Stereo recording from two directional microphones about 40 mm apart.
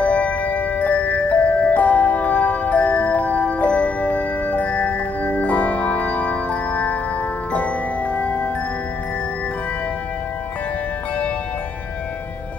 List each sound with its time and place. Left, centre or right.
0.0 s music: left